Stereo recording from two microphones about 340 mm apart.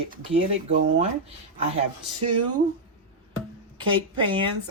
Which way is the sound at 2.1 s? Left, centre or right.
Right.